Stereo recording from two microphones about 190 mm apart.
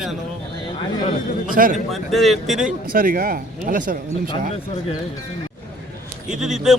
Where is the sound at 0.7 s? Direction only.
25° left (ahead or behind).